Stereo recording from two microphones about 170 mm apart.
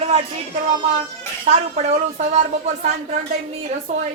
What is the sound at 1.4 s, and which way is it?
Speech, 40° right (ahead or behind).